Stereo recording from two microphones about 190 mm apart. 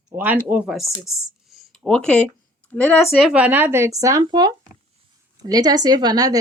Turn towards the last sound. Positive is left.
turn(degrees=-20)  # may be behind; listen again after turning